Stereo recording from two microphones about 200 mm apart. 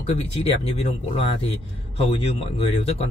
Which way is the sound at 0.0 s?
30° left (ahead or behind).